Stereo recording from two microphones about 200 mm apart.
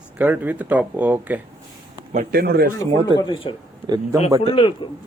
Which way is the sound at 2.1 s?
50° right (ahead or behind).